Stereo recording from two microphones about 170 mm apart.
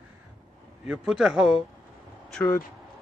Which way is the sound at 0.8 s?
5° right (ahead or behind).